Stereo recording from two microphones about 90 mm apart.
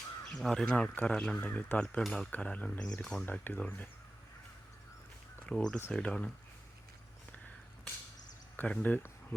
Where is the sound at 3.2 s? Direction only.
20° left (ahead or behind).